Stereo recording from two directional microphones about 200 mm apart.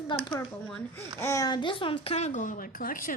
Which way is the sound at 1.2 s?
15° left (ahead or behind).